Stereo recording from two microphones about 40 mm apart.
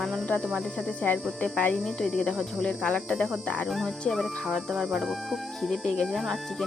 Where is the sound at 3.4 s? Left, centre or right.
Left.